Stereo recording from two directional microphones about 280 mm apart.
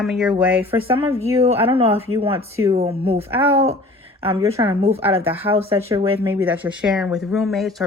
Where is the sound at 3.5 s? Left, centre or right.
Right.